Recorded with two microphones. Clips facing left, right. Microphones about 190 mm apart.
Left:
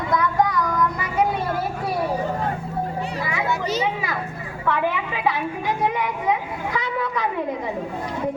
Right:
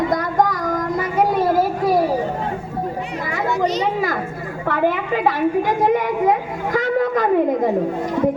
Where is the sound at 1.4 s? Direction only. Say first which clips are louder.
Right 8 dB; 40° right (ahead or behind).